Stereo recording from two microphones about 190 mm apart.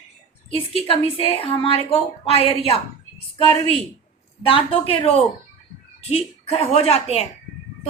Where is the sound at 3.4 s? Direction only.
30° right (ahead or behind).